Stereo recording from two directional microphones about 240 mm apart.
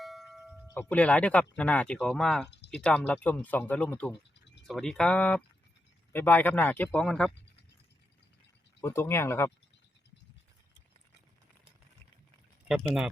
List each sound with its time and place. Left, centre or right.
0.0 s ding: centre
0.7 s speech: centre
8.8 s speech: centre
12.6 s speech: centre